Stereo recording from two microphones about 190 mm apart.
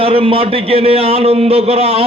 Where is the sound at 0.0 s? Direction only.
30° right (ahead or behind).